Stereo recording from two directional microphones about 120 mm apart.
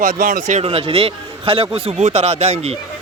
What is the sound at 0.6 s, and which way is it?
Speech, 50° right (ahead or behind).